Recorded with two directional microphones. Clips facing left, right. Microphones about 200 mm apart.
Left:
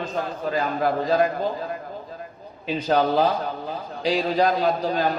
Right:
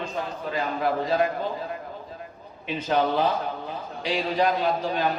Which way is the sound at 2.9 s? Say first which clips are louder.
Left 3 dB; 40° left (ahead or behind).